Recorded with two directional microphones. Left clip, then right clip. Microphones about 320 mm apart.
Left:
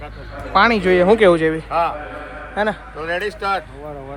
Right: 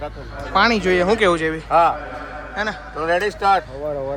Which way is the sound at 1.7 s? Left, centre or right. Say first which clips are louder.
Right 8 dB; right.